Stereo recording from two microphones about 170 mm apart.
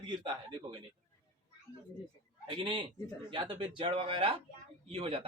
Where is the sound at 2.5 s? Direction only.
30° right (ahead or behind).